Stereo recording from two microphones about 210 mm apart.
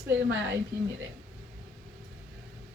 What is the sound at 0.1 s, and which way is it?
Speech, 60° right (ahead or behind).